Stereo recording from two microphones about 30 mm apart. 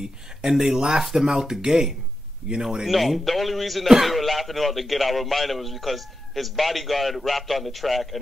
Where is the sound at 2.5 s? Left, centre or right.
Right.